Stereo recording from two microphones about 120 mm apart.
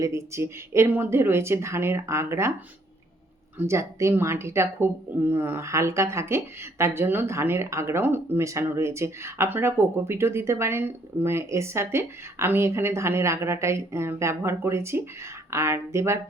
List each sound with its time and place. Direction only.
0.0 s speech: 25° right (ahead or behind)
3.6 s speech: 25° right (ahead or behind)